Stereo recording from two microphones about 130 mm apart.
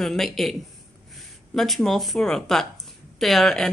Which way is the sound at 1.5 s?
Centre (ahead or behind).